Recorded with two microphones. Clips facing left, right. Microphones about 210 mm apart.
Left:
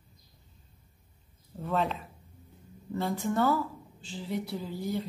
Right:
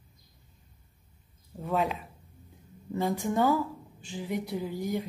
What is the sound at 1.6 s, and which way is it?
A woman's voice, 10° right (ahead or behind).